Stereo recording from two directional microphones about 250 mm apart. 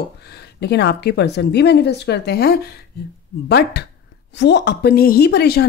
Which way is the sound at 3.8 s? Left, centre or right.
Left.